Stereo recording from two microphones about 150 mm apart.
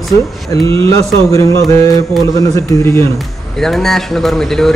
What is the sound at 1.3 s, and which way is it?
Speech, 20° left (ahead or behind).